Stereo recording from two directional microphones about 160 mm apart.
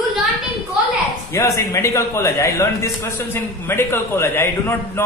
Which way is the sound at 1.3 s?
20° left (ahead or behind).